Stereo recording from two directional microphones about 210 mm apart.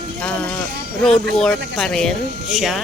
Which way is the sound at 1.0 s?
5° left (ahead or behind).